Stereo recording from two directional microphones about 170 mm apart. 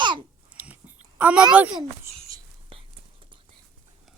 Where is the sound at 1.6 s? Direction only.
5° right (ahead or behind).